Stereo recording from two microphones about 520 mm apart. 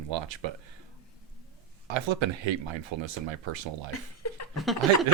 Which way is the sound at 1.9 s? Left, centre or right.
Right.